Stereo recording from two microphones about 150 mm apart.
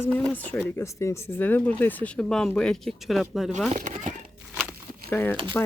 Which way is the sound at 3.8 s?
55° right (ahead or behind).